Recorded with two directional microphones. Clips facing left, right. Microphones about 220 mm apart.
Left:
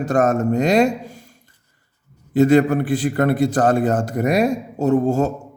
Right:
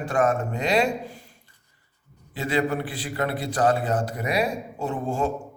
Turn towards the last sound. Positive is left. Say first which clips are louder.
# left 9 dB
turn(degrees=40)  # may be behind; listen again after turning